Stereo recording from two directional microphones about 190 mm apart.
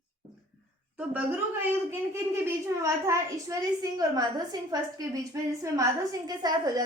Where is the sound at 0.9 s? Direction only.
10° right (ahead or behind).